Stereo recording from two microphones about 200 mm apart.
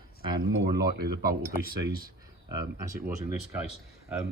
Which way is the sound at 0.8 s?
45° right (ahead or behind).